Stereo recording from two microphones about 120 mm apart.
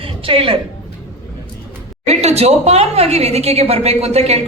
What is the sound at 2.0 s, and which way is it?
A woman's voice, 60° right (ahead or behind).